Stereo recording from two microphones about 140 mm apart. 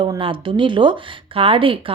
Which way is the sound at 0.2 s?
40° right (ahead or behind).